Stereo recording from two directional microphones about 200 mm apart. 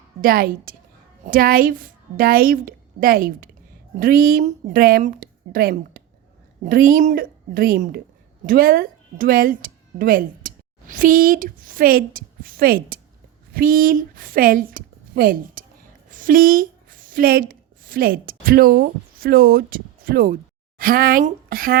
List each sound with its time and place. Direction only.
0.2 s a woman's voice: 45° right (ahead or behind)